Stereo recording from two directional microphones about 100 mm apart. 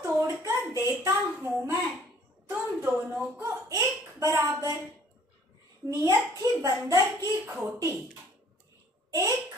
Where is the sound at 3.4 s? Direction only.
30° right (ahead or behind).